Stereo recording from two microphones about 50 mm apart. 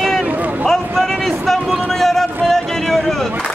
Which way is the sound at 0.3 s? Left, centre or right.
Right.